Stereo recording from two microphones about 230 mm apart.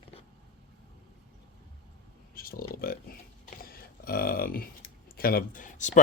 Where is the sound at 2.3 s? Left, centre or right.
Left.